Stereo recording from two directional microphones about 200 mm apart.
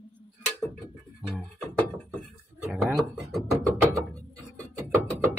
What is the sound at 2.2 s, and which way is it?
Music, centre (ahead or behind).